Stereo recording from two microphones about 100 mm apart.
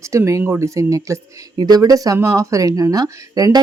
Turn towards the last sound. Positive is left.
turn(degrees=-35)  # may be behind; listen again after turning